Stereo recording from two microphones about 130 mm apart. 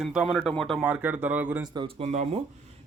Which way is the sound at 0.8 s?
10° right (ahead or behind).